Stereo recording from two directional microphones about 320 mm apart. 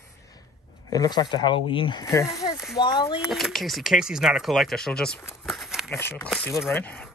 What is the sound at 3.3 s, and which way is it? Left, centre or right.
Speech, centre.